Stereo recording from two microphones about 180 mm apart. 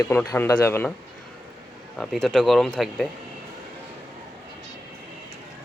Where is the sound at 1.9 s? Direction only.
Centre (ahead or behind).